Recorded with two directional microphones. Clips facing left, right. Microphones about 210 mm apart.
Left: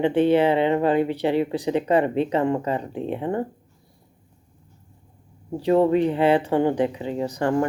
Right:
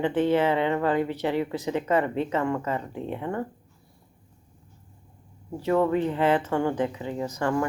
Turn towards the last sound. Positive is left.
turn(degrees=30)  # may be behind; listen again after turning